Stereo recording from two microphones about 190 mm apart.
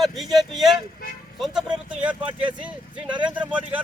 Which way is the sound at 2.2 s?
25° right (ahead or behind).